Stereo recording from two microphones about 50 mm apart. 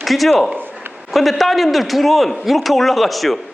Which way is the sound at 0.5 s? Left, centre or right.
Right.